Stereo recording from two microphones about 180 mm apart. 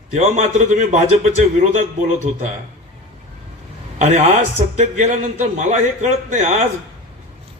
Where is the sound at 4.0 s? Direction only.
40° right (ahead or behind).